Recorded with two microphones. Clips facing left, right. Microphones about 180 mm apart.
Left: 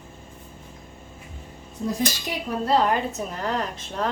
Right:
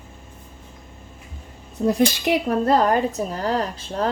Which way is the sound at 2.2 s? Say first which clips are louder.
Right 7 dB; 45° right (ahead or behind).